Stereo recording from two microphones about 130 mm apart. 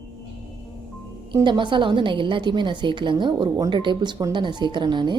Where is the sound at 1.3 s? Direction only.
35° right (ahead or behind).